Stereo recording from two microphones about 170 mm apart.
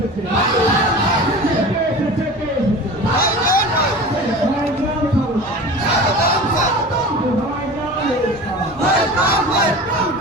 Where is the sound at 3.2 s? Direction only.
60° left (ahead or behind).